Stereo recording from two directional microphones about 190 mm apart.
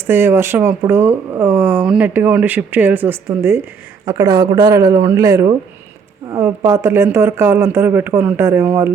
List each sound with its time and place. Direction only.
0.1 s speech: 10° right (ahead or behind)